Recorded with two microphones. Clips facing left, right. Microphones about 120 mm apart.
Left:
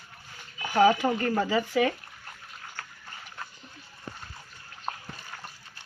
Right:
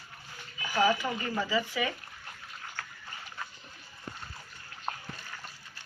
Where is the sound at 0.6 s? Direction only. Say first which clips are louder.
Left 6 dB; 55° left (ahead or behind).